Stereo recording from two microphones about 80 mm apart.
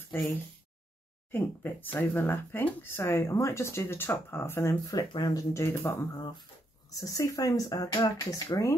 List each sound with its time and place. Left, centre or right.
1.3 s speech: left
4.8 s speech: left
5.5 s speech: left
6.1 s speech: left
6.9 s speech: left